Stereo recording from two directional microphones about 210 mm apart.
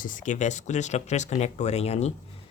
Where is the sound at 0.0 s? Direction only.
35° left (ahead or behind).